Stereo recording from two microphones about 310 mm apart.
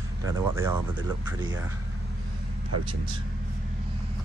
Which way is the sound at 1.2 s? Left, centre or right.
Centre.